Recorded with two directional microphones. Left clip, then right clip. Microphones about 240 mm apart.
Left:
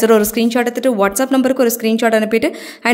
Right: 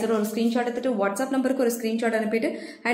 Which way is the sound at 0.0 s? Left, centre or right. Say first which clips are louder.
Left 12 dB; left.